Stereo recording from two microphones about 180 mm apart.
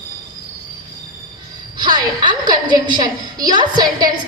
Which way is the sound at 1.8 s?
25° right (ahead or behind).